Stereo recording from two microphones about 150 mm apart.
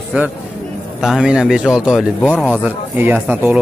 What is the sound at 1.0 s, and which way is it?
Speech, 5° right (ahead or behind).